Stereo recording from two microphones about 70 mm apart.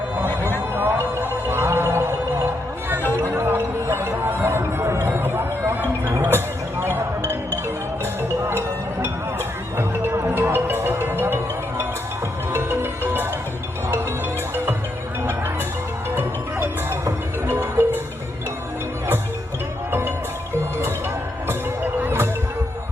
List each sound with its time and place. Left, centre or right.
0.8 s music: right
8.4 s music: right
12.5 s music: right
16.1 s music: right
19.9 s music: right
22.0 s music: right